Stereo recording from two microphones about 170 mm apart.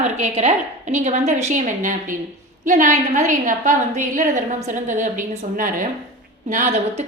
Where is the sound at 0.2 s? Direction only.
40° right (ahead or behind).